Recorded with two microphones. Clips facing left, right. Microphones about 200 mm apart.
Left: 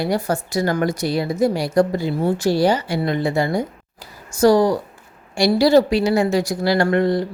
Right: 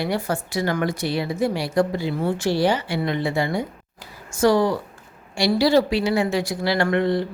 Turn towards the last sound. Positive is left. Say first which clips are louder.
# left 3 dB
turn(degrees=40)  # may be behind; listen again after turning